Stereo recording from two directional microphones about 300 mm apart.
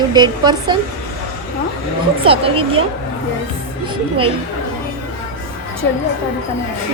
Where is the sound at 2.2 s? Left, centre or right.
Centre.